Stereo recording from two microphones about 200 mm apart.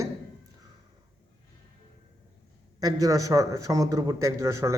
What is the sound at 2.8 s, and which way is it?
A man's voice, 20° right (ahead or behind).